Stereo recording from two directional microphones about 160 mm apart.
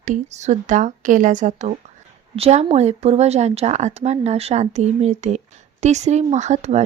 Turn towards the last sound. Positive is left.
turn(degrees=-45)  # may be behind; listen again after turning